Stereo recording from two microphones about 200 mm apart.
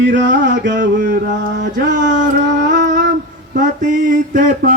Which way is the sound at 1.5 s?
60° right (ahead or behind).